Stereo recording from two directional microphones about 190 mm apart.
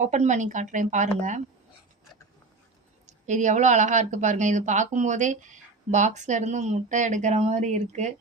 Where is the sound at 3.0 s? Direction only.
40° right (ahead or behind).